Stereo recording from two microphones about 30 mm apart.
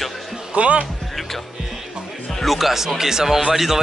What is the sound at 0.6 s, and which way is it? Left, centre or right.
Speech, right.